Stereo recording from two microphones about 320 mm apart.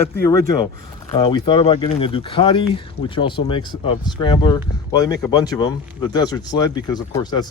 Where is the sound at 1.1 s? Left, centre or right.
Centre.